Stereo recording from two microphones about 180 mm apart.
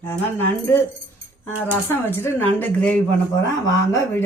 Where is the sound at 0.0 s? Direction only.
10° left (ahead or behind).